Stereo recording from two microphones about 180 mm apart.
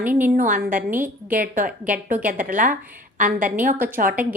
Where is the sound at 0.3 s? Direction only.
45° right (ahead or behind).